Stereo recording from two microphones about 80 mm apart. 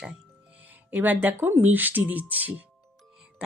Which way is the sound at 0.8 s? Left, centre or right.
Right.